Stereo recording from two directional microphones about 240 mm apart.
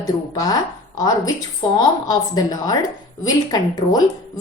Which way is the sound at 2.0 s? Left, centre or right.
Centre.